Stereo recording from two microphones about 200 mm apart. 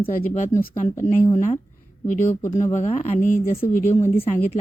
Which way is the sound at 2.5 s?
35° left (ahead or behind).